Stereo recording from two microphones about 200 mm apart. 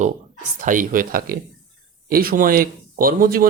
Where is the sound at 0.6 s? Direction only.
40° right (ahead or behind).